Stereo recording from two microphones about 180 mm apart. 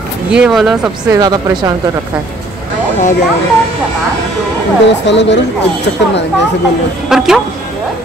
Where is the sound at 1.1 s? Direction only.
20° right (ahead or behind).